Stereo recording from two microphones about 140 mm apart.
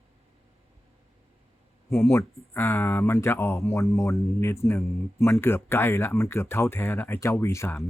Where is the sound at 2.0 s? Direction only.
20° left (ahead or behind).